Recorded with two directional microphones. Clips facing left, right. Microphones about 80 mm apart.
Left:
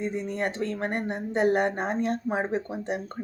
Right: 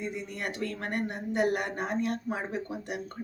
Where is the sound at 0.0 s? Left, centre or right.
Left.